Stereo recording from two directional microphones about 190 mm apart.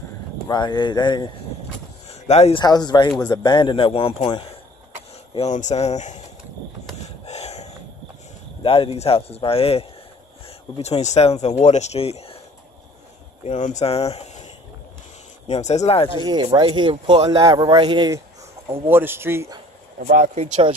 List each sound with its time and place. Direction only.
0.5 s speech: 25° left (ahead or behind)
2.0 s a sound: 35° left (ahead or behind)
2.6 s speech: 20° left (ahead or behind); by 6.2 s 40° left (ahead or behind)
7.2 s snort: 35° left (ahead or behind)
8.6 s speech: 30° left (ahead or behind)
13.4 s speech: 40° left (ahead or behind)
16.4 s speech: 25° right (ahead or behind)
18.9 s speech: 10° right (ahead or behind)